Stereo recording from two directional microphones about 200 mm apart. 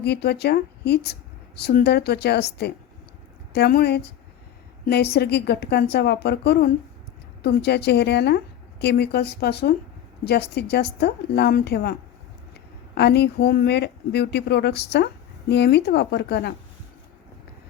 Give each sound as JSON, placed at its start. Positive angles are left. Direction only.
{"t": 0.0, "sound": "a woman's voice", "side_deg": 55}
{"t": 5.1, "sound": "a woman's voice", "side_deg": 55}